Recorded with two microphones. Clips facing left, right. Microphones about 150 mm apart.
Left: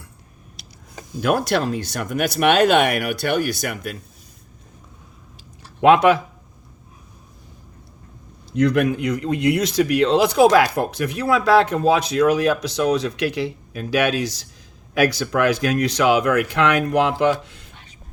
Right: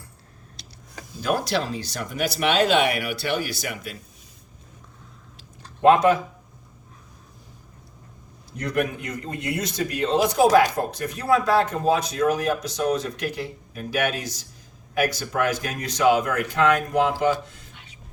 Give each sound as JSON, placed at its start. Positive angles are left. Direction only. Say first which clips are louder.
{"t": 1.2, "sound": "speech", "louder": "left 5 dB", "side_deg": 60}
{"t": 5.8, "sound": "speech", "louder": "left 3 dB", "side_deg": 75}
{"t": 8.5, "sound": "speech", "louder": "left 8 dB", "side_deg": 90}
{"t": 15.6, "sound": "speech", "louder": "left 3 dB", "side_deg": 75}